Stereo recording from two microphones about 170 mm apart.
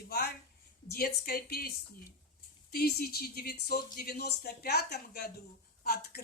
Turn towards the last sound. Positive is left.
turn(degrees=65)  # may be behind; listen again after turning